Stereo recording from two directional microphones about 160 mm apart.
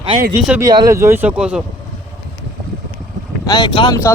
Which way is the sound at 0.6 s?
25° right (ahead or behind).